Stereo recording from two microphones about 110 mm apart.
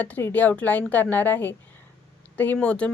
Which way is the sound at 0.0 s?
15° left (ahead or behind).